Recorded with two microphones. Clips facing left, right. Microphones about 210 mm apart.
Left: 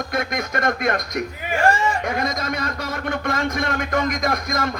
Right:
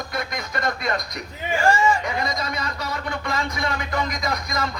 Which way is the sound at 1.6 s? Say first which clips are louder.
Even; 60° left (ahead or behind).